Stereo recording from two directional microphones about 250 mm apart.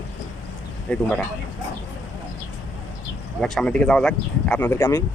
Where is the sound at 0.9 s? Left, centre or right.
Centre.